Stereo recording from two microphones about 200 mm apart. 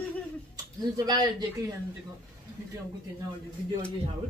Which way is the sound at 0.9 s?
20° right (ahead or behind).